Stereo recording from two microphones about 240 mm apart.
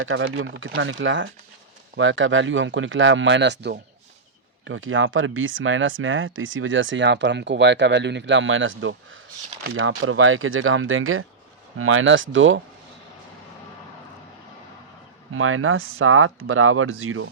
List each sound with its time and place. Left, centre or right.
0.0 s speech: right
15.3 s speech: right